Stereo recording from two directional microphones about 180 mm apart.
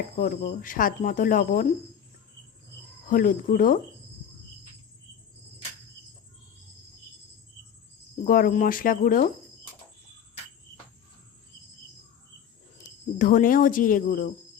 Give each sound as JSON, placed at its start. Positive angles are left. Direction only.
{"t": 0.2, "sound": "speech", "side_deg": 45}
{"t": 3.1, "sound": "speech", "side_deg": 50}
{"t": 8.2, "sound": "speech", "side_deg": 50}
{"t": 12.8, "sound": "speech", "side_deg": 45}